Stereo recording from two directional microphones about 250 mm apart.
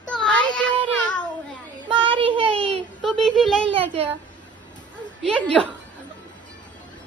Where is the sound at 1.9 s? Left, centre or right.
Right.